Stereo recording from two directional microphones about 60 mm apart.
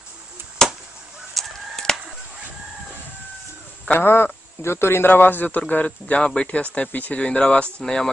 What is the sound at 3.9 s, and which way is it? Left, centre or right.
Speech, left.